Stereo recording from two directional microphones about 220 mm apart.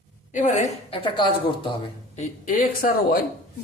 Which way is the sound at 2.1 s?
40° left (ahead or behind).